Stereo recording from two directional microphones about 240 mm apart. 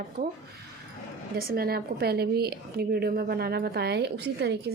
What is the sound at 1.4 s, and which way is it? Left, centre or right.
A woman's voice, right.